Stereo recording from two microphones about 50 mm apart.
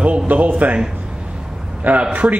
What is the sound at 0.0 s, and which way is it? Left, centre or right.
Speech, right.